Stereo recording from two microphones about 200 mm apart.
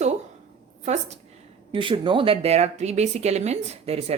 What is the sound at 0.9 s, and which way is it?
A woman's voice, 35° right (ahead or behind).